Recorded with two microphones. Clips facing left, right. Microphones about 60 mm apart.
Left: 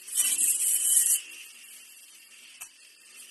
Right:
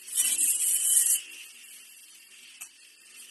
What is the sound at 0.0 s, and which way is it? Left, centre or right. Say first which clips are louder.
Wood: even; centre.